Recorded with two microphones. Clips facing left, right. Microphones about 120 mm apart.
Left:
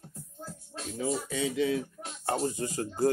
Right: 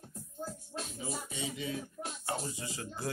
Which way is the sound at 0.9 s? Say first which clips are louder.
Left 13 dB; 85° left.